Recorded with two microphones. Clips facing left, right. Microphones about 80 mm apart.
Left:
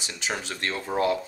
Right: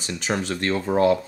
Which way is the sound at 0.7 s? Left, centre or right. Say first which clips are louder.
Right 7 dB; right.